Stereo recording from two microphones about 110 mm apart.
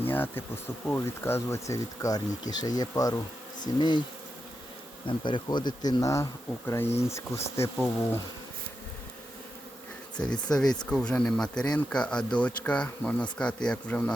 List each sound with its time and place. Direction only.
0.0 s speech: 20° left (ahead or behind); by 3.2 s 35° left (ahead or behind)
3.8 s bee: 45° left (ahead or behind)
5.0 s speech: 45° left (ahead or behind); by 8.2 s 25° left (ahead or behind)
10.2 s speech: 10° left (ahead or behind)